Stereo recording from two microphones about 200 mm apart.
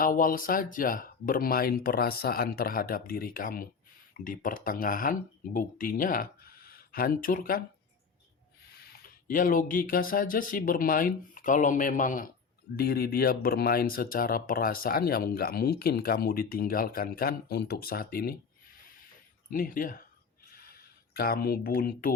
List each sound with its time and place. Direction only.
0.0 s speech: 45° left (ahead or behind)
8.7 s speech: 50° left (ahead or behind)
19.5 s speech: 45° left (ahead or behind)
20.5 s a sound: 50° left (ahead or behind)